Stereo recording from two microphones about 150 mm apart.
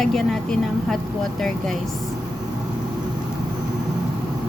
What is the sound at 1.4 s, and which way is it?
Speech, 5° left (ahead or behind).